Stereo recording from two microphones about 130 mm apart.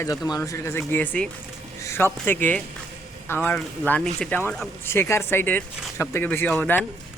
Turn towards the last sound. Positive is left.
turn(degrees=10)  # may be behind; listen again after turning